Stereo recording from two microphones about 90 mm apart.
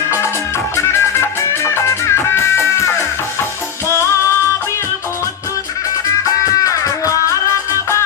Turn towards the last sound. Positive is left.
turn(degrees=35)  # may be behind; listen again after turning